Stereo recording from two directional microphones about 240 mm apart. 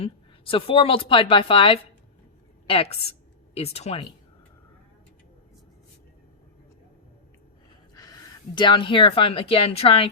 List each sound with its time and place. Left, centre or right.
0.0 s a woman's voice: left
3.5 s a woman's voice: left
7.9 s speech: centre